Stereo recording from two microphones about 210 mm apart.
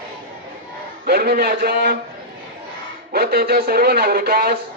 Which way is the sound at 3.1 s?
45° right (ahead or behind).